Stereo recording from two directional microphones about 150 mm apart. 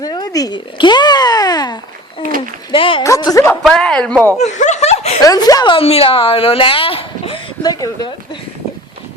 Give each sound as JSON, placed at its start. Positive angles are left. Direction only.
{"t": 0.0, "sound": "a sound", "side_deg": 25}
{"t": 2.7, "sound": "speech", "side_deg": 35}
{"t": 3.0, "sound": "speech", "side_deg": 25}
{"t": 3.6, "sound": "speech", "side_deg": 5}
{"t": 4.4, "sound": "speech", "side_deg": 50}
{"t": 5.2, "sound": "speech", "side_deg": 25}
{"t": 7.6, "sound": "speech", "side_deg": 25}